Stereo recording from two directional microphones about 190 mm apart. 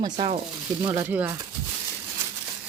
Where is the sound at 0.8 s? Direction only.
15° right (ahead or behind).